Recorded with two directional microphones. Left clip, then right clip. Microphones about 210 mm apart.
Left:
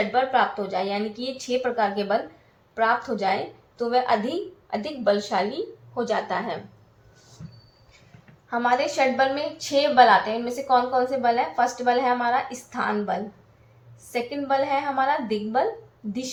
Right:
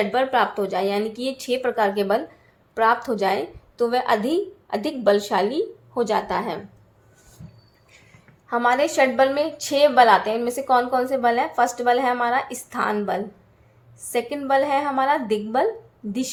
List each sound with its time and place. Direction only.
0.0 s a woman's voice: 50° right (ahead or behind)
8.4 s a woman's voice: 50° right (ahead or behind)